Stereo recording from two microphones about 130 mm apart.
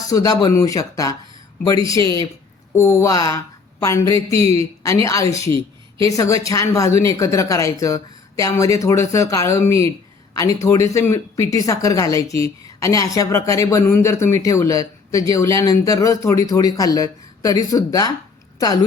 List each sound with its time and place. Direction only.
0.1 s a woman's voice: 30° left (ahead or behind)